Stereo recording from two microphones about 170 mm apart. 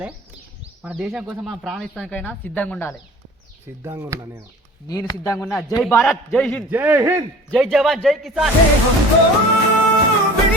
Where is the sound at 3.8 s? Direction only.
15° right (ahead or behind).